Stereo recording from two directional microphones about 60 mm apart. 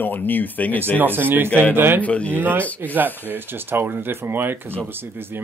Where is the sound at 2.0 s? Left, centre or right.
Left.